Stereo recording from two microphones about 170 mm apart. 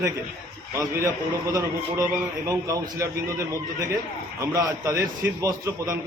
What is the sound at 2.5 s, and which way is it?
A man's voice, 20° right (ahead or behind).